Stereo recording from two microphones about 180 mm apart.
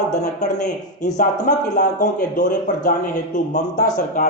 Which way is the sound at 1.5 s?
50° left (ahead or behind).